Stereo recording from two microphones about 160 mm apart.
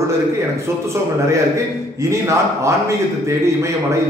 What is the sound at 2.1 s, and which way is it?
A man's voice, 20° right (ahead or behind).